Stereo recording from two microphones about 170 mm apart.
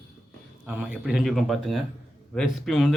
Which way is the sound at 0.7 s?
10° right (ahead or behind).